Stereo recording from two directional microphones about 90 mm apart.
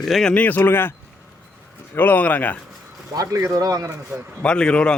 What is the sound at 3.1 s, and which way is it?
Speech, 40° right (ahead or behind).